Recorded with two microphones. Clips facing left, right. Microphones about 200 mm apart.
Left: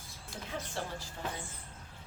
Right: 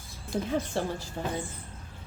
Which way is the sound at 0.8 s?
30° right (ahead or behind).